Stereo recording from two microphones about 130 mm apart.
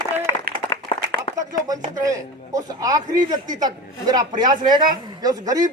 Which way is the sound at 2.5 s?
25° right (ahead or behind).